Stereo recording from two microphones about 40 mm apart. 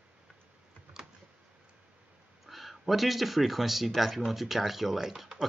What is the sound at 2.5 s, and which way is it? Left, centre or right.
Speech, centre.